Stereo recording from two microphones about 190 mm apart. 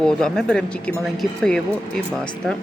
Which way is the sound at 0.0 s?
5° left (ahead or behind).